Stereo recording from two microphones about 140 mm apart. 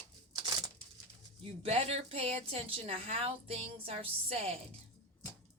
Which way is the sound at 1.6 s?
50° right (ahead or behind).